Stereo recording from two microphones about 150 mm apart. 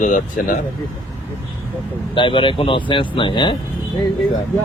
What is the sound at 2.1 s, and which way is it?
Speech, 35° left (ahead or behind).